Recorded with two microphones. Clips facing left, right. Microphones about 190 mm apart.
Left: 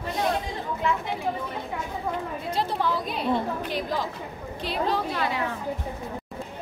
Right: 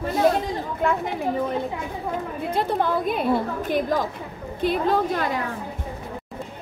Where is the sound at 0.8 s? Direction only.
50° right (ahead or behind).